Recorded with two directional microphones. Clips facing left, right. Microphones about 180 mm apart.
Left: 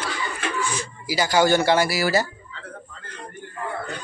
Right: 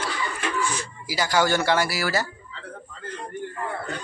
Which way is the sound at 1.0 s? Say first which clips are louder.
Left 3 dB; 25° left (ahead or behind).